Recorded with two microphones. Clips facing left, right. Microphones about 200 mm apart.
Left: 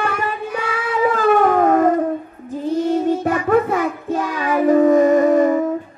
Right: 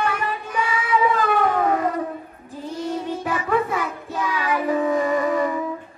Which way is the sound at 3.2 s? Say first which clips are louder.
Left 6 dB; 45° left (ahead or behind).